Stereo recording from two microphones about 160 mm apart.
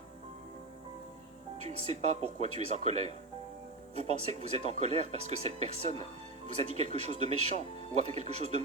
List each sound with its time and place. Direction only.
1.6 s speech: 45° right (ahead or behind)